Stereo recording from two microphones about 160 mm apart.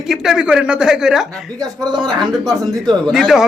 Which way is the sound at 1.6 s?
25° right (ahead or behind).